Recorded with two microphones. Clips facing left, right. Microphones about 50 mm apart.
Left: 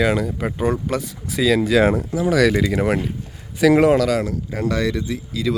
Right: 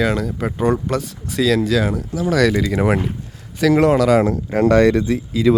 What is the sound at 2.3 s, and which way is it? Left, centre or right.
Speech, centre.